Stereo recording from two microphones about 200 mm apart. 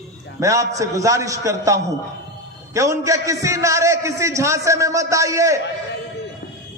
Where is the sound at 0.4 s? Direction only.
15° right (ahead or behind).